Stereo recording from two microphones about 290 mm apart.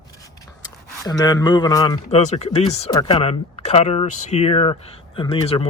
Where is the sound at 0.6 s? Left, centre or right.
Centre.